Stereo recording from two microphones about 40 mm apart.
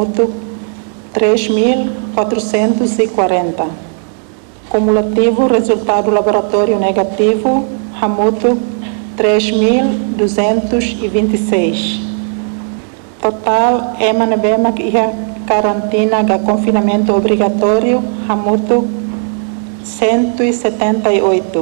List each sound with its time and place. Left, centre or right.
0.0 s a woman's voice: left
4.7 s a woman's voice: centre
5.1 s a woman's voice: centre
13.2 s a woman's voice: centre
20.0 s a woman's voice: left